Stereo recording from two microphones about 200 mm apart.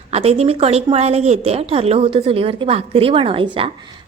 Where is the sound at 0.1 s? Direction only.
30° right (ahead or behind).